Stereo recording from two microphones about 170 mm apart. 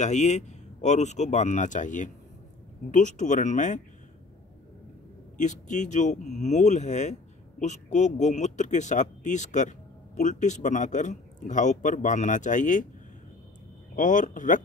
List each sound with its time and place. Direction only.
0.0 s speech: 45° left (ahead or behind)
5.4 s speech: 45° left (ahead or behind)
13.9 s speech: 50° left (ahead or behind)